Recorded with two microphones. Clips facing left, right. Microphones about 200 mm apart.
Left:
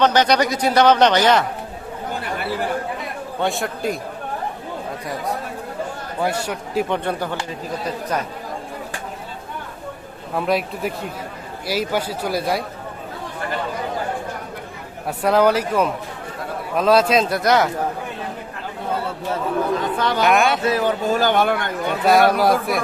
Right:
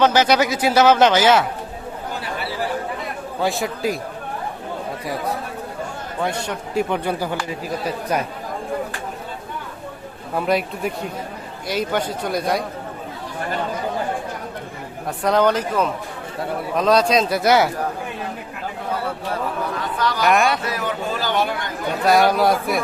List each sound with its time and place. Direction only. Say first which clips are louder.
0.0 s speech: even; 5° right (ahead or behind)
3.4 s speech: right 1 dB; centre (ahead or behind)
6.1 s speech: left 1 dB; 5° left (ahead or behind)
10.3 s speech: even; centre (ahead or behind)
15.0 s speech: left 1 dB; 5° left (ahead or behind)
20.0 s speech: left 2 dB; 25° left (ahead or behind)
20.2 s speech: even; centre (ahead or behind)
20.7 s a man's voice: left 6 dB; 30° left (ahead or behind); by 21.7 s 55° left (ahead or behind)
22.0 s speech: left 1 dB; centre (ahead or behind)